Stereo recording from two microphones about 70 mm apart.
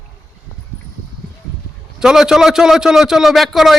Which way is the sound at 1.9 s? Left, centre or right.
Centre.